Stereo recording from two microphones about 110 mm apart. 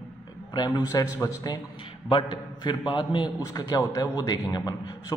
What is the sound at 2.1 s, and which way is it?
A man's voice, 45° left (ahead or behind).